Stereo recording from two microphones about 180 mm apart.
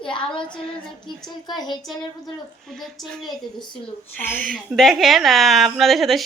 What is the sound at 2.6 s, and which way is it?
A woman's voice, centre (ahead or behind).